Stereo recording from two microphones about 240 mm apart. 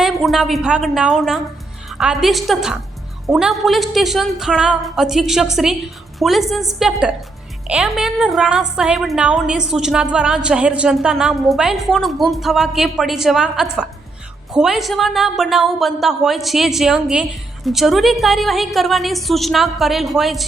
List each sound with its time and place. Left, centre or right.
0.0 s a woman's voice: centre